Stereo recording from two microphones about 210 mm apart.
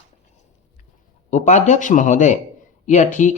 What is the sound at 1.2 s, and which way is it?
Speech, 35° left (ahead or behind).